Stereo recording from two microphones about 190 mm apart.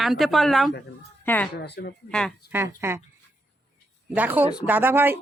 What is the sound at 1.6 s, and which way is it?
Speech, 60° left (ahead or behind).